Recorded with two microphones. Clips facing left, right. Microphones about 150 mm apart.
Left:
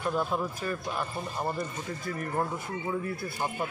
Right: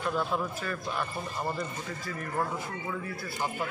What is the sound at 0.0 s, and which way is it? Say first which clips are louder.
A man's voice: left 1 dB; 15° left (ahead or behind).